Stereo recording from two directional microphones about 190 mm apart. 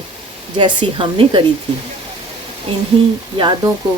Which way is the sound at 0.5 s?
25° right (ahead or behind).